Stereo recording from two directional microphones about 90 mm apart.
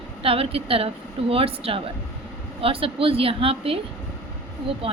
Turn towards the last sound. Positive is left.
turn(degrees=-90)